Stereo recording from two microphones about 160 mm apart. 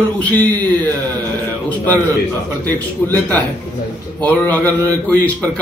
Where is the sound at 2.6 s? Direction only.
10° left (ahead or behind).